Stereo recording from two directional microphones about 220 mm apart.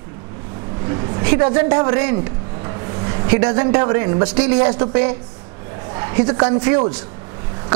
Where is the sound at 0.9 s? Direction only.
20° right (ahead or behind).